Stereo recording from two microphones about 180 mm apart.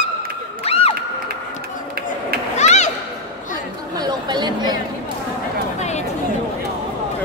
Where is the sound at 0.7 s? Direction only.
35° left (ahead or behind).